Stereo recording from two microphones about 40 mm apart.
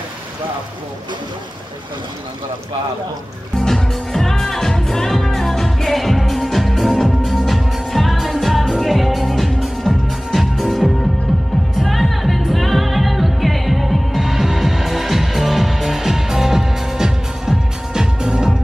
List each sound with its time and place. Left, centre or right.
3.5 s music: centre